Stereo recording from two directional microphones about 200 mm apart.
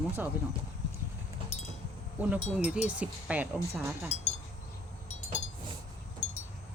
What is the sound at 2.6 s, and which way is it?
Speech, 5° right (ahead or behind).